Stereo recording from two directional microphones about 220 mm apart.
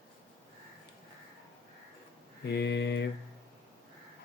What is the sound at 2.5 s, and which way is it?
Mantra, 50° left (ahead or behind).